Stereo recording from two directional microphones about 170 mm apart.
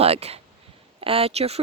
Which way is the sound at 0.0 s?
35° right (ahead or behind).